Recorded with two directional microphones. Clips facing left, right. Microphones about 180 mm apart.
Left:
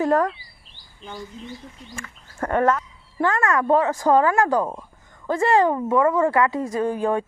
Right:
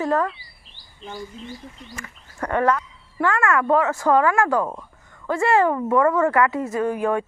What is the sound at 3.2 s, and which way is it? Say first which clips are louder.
Speech: even; 35° left (ahead or behind).